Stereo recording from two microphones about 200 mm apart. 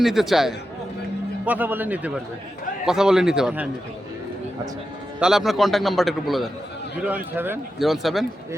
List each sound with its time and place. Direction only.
0.0 s a man's voice: centre (ahead or behind)
5.2 s a man's voice: centre (ahead or behind)
7.3 s a man's voice: 10° right (ahead or behind)
7.8 s a man's voice: centre (ahead or behind)